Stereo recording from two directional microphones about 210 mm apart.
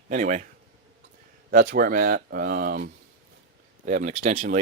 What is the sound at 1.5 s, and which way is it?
Speech, 45° right (ahead or behind).